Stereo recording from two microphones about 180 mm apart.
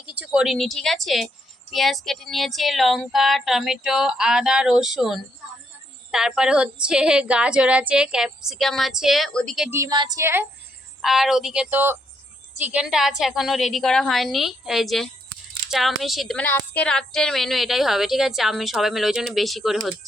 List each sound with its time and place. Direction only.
0.1 s a woman's voice: 5° right (ahead or behind)
9.6 s speech: 15° right (ahead or behind)
11.0 s a woman's voice: centre (ahead or behind)